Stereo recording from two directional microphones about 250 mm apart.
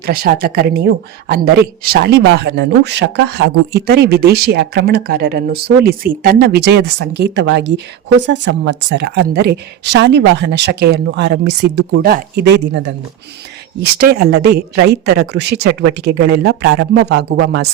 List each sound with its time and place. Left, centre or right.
0.0 s speech: right
14.0 s speech: right